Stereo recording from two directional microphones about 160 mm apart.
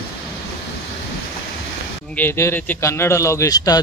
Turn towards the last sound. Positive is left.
turn(degrees=25)  # may be behind; listen again after turning